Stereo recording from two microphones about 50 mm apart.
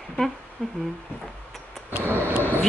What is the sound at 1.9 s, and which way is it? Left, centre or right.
Vehicle, right.